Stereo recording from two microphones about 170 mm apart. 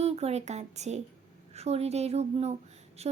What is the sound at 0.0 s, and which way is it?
A child's voice, 40° right (ahead or behind).